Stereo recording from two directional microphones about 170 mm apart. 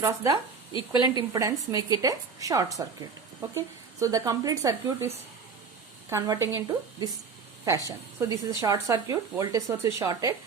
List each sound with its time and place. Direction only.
0.0 s speech: 20° right (ahead or behind)
0.7 s speech: 30° left (ahead or behind)
1.0 s speech: 20° right (ahead or behind)